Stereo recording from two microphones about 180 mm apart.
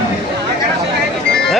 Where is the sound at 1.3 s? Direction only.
5° left (ahead or behind).